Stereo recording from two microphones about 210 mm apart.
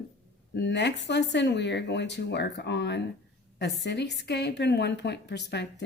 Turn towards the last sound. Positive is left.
turn(degrees=55)  # may be behind; listen again after turning